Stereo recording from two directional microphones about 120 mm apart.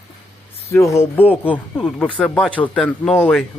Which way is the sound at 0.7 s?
25° left (ahead or behind).